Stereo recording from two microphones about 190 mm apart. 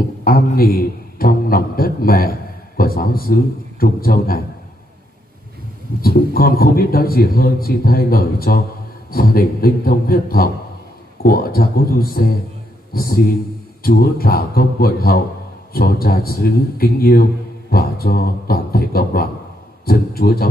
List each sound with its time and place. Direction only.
0.2 s a man's voice: 50° left (ahead or behind)
5.9 s a man's voice: 50° left (ahead or behind)